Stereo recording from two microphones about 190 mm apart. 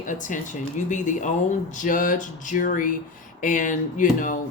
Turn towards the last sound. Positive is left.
turn(degrees=45)  # may be behind; listen again after turning